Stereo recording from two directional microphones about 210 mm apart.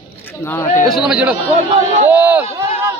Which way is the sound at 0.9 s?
Centre (ahead or behind).